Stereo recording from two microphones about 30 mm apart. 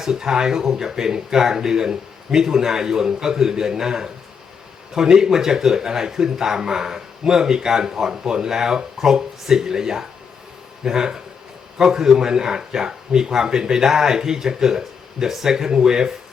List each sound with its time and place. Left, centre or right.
0.0 s speech: centre
4.9 s speech: centre